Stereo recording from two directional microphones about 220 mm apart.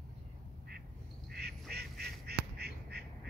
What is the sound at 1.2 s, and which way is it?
Duck, 45° right (ahead or behind).